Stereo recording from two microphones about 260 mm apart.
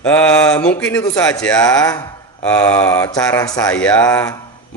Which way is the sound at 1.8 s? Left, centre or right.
Centre.